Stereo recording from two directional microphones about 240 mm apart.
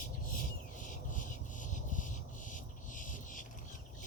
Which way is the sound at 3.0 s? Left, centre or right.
Left.